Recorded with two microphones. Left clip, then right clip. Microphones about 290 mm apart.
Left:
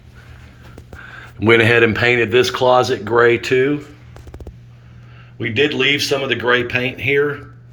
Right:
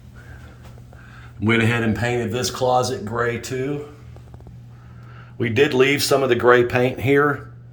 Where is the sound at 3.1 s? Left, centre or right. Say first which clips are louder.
Left 11 dB; left.